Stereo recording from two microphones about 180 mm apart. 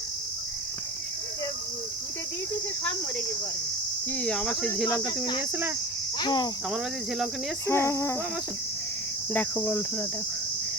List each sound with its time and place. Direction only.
4.2 s speech: 5° left (ahead or behind)
6.1 s cricket: 25° left (ahead or behind)
7.7 s cricket: 15° left (ahead or behind)
9.3 s cricket: 5° left (ahead or behind)